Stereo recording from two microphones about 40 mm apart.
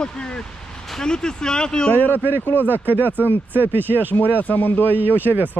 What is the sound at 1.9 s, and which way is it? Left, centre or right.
Speech, left.